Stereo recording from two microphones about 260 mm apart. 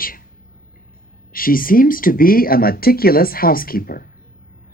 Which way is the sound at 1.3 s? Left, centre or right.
Left.